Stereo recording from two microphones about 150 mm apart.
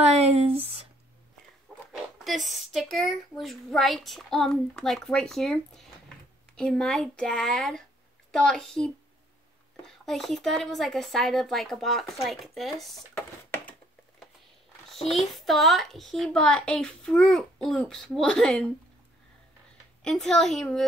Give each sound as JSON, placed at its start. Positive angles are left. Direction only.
{"t": 0.0, "sound": "a sound", "side_deg": -45}
{"t": 1.9, "sound": "speech", "side_deg": 0}
{"t": 15.0, "sound": "speech", "side_deg": 0}
{"t": 20.0, "sound": "speech", "side_deg": 5}